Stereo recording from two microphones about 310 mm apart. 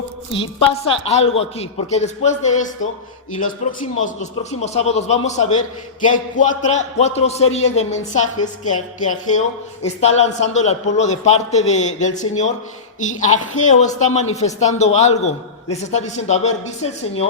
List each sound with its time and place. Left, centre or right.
0.3 s a man's voice: centre